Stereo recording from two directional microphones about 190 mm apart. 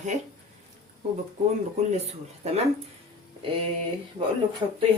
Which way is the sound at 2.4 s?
35° right (ahead or behind).